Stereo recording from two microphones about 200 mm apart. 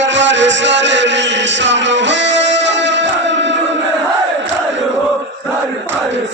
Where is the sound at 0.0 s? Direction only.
65° right (ahead or behind).